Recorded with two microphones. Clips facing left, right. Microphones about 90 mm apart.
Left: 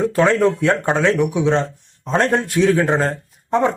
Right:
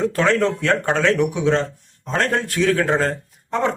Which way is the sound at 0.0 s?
15° left (ahead or behind).